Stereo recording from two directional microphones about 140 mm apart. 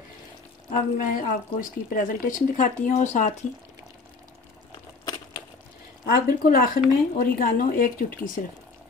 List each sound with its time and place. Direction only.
0.7 s speech: 70° left (ahead or behind)
5.0 s crushing: 30° left (ahead or behind)
6.1 s speech: 90° left